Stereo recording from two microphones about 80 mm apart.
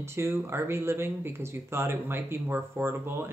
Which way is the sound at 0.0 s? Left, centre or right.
Right.